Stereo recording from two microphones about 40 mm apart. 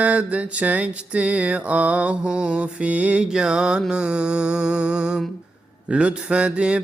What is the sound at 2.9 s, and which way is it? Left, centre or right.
Mantra, right.